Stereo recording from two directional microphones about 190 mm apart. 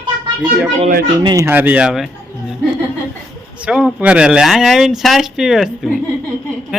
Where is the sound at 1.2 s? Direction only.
20° right (ahead or behind).